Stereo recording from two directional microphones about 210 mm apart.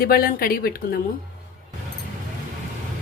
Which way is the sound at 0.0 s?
45° left (ahead or behind).